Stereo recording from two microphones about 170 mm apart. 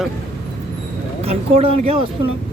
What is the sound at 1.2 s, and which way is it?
Speech, 35° right (ahead or behind).